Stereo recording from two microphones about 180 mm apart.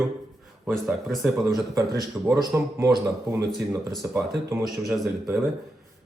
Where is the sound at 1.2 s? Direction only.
15° right (ahead or behind).